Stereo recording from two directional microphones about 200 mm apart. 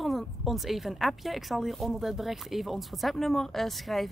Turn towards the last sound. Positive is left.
turn(degrees=0)  # may be behind; listen again after turning